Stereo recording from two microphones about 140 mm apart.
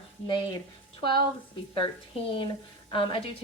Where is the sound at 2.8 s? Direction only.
35° left (ahead or behind).